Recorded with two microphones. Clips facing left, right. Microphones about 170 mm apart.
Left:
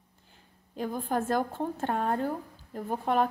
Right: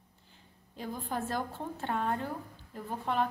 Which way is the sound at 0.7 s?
55° left (ahead or behind).